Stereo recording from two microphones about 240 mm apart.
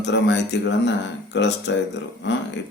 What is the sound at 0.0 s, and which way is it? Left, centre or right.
Speech, left.